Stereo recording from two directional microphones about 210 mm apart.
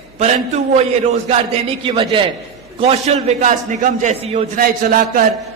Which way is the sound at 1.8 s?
25° right (ahead or behind).